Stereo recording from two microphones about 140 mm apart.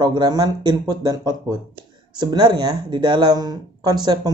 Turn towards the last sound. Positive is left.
turn(degrees=-30)  # may be behind; listen again after turning